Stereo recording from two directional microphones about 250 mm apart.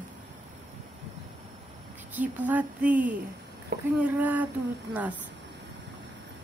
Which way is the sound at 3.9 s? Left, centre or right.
Centre.